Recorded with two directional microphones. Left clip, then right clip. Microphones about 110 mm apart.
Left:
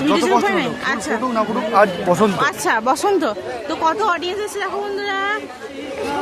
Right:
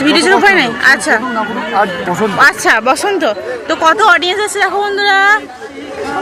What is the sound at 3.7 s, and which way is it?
Speech, centre (ahead or behind).